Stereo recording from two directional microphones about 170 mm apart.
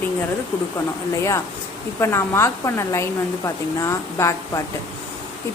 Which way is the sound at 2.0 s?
15° left (ahead or behind).